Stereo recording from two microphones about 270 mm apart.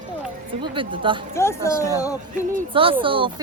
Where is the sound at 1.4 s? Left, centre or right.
Centre.